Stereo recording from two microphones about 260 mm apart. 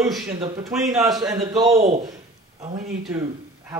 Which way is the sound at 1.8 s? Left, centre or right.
Right.